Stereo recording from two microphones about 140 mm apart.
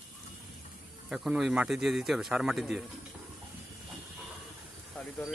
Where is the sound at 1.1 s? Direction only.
5° right (ahead or behind).